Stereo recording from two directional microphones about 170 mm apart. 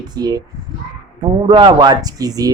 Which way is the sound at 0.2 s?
20° right (ahead or behind).